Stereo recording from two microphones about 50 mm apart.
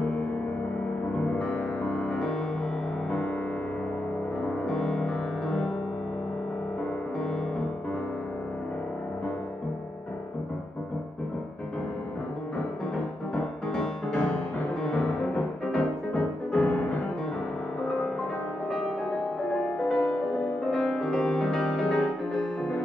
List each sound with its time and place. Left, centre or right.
0.0 s music: left
4.6 s music: centre
12.5 s music: centre
19.5 s music: centre